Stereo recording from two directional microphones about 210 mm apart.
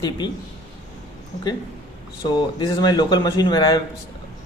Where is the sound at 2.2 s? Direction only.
20° left (ahead or behind).